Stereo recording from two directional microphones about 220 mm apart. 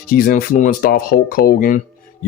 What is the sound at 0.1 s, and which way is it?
Speech, 40° left (ahead or behind).